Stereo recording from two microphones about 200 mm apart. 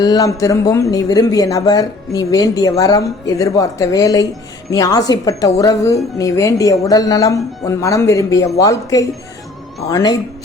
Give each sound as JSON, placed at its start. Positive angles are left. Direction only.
{"t": 0.0, "sound": "speech", "side_deg": 20}